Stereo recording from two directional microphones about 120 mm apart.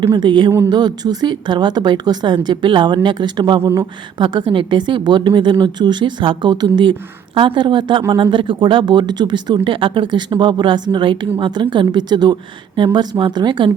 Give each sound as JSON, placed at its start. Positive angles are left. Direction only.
{"t": 0.0, "sound": "speech", "side_deg": -40}
{"t": 3.6, "sound": "speech", "side_deg": -20}
{"t": 4.2, "sound": "a woman's voice", "side_deg": -40}